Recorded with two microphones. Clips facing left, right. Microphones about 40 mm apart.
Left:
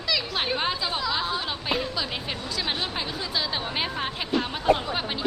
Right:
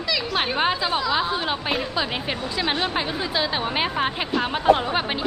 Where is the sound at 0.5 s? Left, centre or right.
Right.